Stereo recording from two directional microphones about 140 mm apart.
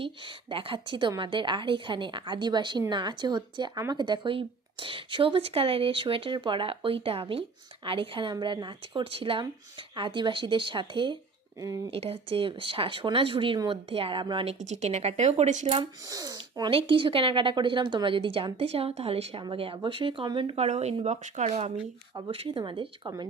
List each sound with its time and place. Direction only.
0.5 s a woman's voice: 40° right (ahead or behind)
14.6 s speech: 55° right (ahead or behind)
16.0 s speech: 25° right (ahead or behind)
16.7 s a woman's voice: 40° right (ahead or behind)
22.1 s a woman's voice: 40° right (ahead or behind)